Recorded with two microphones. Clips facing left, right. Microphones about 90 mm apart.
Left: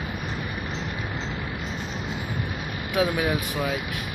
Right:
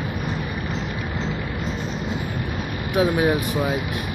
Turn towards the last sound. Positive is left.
turn(degrees=-30)  # may be behind; listen again after turning